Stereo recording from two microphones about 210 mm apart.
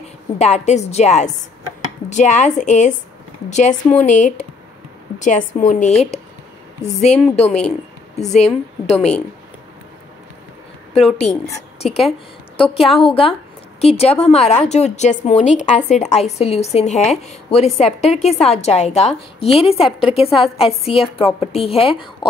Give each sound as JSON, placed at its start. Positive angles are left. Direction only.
{"t": 0.4, "sound": "a woman's voice", "side_deg": 30}
{"t": 11.0, "sound": "a woman's voice", "side_deg": 30}
{"t": 11.8, "sound": "a woman's voice", "side_deg": 0}
{"t": 12.7, "sound": "a woman's voice", "side_deg": 25}